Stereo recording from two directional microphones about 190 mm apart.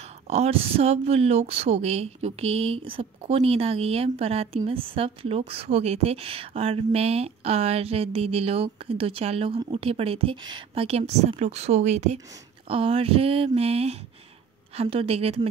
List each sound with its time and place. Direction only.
0.3 s speech: 35° right (ahead or behind)